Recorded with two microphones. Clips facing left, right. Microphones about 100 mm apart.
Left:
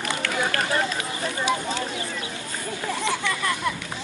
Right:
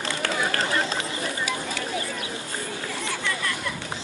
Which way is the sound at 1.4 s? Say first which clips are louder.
Left 4 dB; 25° left (ahead or behind).